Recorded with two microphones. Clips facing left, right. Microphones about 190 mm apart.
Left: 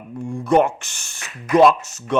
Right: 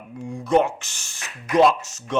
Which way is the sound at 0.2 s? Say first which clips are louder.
Left 3 dB; 50° left (ahead or behind).